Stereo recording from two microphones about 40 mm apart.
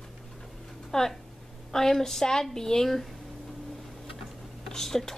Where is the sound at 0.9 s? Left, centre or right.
Centre.